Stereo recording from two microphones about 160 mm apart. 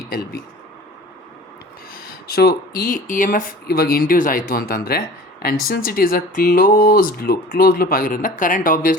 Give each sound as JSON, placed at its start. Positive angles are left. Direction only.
{"t": 1.9, "sound": "speech", "side_deg": 70}